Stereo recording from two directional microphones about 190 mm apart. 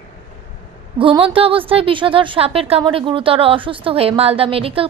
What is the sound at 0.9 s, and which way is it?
A woman's voice, 25° right (ahead or behind).